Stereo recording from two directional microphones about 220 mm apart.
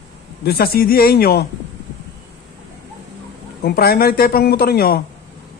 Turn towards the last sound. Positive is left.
turn(degrees=45)  # may be behind; listen again after turning